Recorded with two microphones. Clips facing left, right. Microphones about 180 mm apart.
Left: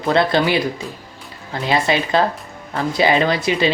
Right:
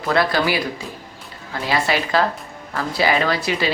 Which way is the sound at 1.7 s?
20° left (ahead or behind).